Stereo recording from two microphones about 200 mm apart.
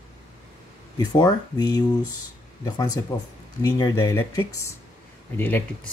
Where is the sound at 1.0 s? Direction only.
20° left (ahead or behind).